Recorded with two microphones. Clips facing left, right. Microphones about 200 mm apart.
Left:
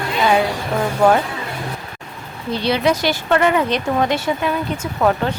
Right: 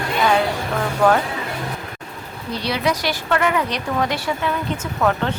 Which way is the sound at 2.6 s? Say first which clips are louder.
Left 4 dB; 25° left (ahead or behind).